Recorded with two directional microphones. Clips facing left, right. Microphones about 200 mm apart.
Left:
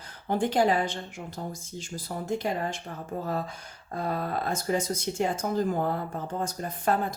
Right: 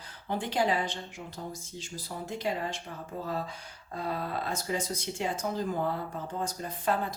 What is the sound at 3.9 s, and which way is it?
Speech, 50° left (ahead or behind).